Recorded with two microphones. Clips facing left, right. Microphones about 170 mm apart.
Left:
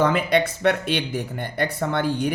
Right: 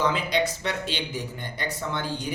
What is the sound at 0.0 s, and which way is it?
A man's voice, 55° left (ahead or behind).